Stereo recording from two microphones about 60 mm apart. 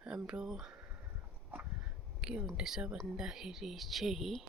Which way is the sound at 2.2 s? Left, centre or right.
Centre.